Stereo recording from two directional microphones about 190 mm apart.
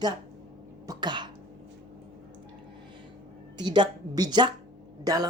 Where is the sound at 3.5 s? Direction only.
25° right (ahead or behind).